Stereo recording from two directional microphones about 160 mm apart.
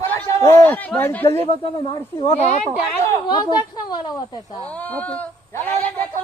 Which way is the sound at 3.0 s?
25° left (ahead or behind).